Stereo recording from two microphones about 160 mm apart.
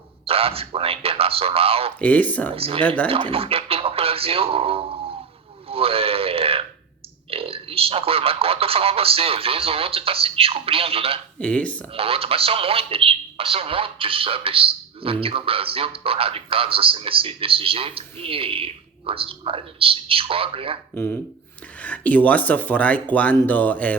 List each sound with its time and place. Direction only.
0.3 s speech: 35° right (ahead or behind)
2.0 s speech: 10° left (ahead or behind)
2.6 s speech: 35° right (ahead or behind)
2.8 s speech: 10° left (ahead or behind)
3.1 s speech: 35° right (ahead or behind)
5.6 s radio: 35° right (ahead or behind)
7.3 s speech: 35° right (ahead or behind)
11.3 s speech: 5° left (ahead or behind)
11.9 s speech: 35° right (ahead or behind)
20.9 s speech: 10° left (ahead or behind)